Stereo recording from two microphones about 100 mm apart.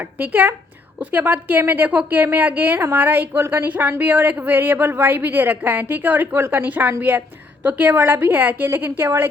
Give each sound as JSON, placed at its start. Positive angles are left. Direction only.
{"t": 0.0, "sound": "a woman's voice", "side_deg": -15}